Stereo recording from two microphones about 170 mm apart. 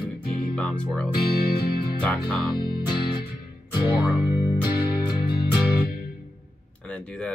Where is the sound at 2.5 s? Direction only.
65° left (ahead or behind).